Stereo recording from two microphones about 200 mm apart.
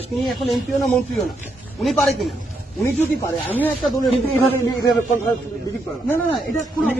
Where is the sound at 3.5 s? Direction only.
10° left (ahead or behind).